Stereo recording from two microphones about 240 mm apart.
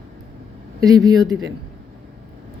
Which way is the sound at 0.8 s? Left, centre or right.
Centre.